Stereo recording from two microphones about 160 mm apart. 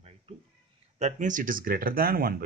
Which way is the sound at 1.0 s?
45° right (ahead or behind).